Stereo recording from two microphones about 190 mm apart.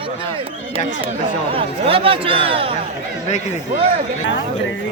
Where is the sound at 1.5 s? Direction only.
30° right (ahead or behind).